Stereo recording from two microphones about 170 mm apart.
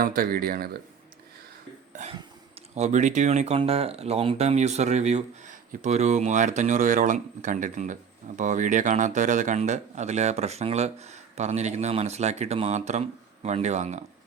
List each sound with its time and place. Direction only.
0.0 s speech: 55° right (ahead or behind)
1.9 s cough: 45° right (ahead or behind)
2.1 s speech: 35° right (ahead or behind)